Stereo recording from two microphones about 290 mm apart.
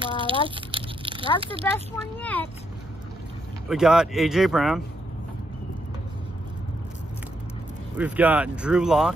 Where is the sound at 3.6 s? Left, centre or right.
Centre.